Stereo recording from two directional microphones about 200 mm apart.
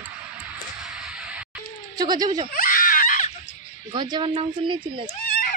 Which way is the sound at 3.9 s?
20° right (ahead or behind).